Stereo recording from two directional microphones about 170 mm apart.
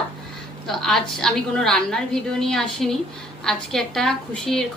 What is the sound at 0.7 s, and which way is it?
A woman's voice, centre (ahead or behind).